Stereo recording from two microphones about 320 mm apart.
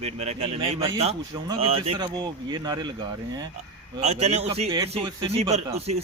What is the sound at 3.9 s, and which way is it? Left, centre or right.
Speech, centre.